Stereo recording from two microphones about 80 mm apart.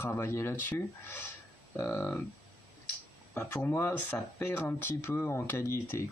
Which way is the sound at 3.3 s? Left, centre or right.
Left.